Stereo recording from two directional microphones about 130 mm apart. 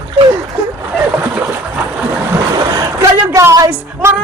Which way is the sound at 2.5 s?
30° right (ahead or behind).